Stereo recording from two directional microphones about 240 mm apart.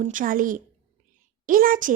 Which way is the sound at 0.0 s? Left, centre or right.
Right.